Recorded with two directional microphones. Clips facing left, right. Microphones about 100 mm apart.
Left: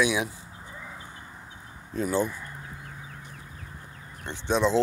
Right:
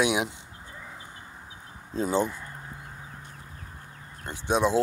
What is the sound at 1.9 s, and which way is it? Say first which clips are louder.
Speech: right 1 dB; 20° right (ahead or behind).